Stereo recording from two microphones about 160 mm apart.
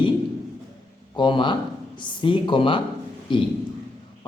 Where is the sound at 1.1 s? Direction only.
30° left (ahead or behind).